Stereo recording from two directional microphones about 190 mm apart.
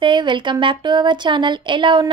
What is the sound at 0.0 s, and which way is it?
A woman's voice, 25° right (ahead or behind).